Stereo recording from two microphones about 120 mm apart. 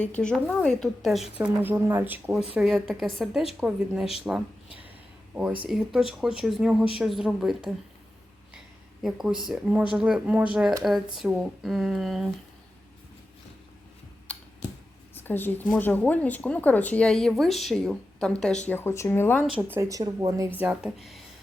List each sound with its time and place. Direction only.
0.0 s a woman's voice: 10° left (ahead or behind)
1.4 s speech: 15° right (ahead or behind)
2.6 s a woman's voice: centre (ahead or behind)
9.0 s a woman's voice: 5° right (ahead or behind)
14.3 s a sound: 10° left (ahead or behind)
15.1 s a woman's voice: 15° left (ahead or behind)
18.7 s a woman's voice: 20° left (ahead or behind)
19.5 s speech: 15° right (ahead or behind)
20.6 s speech: 10° right (ahead or behind)
21.0 s a woman's voice: centre (ahead or behind)